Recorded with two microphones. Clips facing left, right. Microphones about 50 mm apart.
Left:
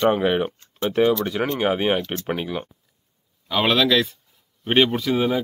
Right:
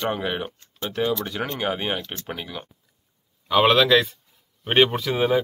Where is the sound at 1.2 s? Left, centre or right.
Centre.